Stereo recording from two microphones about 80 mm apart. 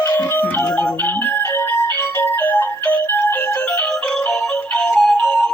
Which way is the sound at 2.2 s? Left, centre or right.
Left.